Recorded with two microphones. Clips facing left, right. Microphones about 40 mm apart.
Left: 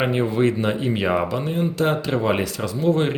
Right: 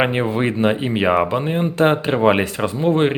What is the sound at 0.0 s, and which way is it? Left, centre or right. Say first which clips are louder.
Speech: right 1 dB; right.